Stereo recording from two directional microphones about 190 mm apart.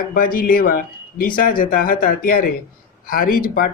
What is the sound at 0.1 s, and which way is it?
Speech, 50° left (ahead or behind).